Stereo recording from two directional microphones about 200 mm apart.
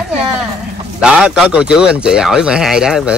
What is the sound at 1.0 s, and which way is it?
Speech, 5° right (ahead or behind).